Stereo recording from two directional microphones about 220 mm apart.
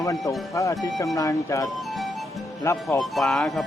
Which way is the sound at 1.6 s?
Centre (ahead or behind).